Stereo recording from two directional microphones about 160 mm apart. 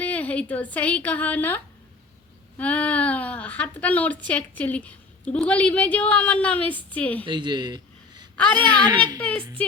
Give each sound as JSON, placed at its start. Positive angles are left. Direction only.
{"t": 0.0, "sound": "a woman's voice", "side_deg": 10}
{"t": 7.3, "sound": "a man's voice", "side_deg": -30}
{"t": 8.4, "sound": "a woman's voice", "side_deg": 10}
{"t": 8.9, "sound": "a woman's voice", "side_deg": -25}
{"t": 9.1, "sound": "a woman's voice", "side_deg": 10}